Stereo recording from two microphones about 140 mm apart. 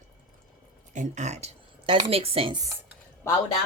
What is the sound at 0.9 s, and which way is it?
A woman's voice, 60° right (ahead or behind).